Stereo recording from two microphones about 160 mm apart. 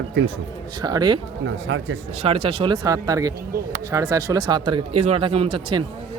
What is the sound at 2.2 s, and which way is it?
Speech, 40° right (ahead or behind).